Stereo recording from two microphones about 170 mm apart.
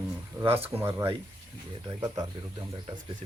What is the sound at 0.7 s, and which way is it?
Speech, 15° right (ahead or behind).